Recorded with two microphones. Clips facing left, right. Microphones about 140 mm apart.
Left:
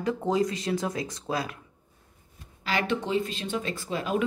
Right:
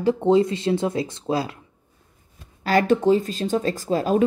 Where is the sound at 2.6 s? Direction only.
40° right (ahead or behind).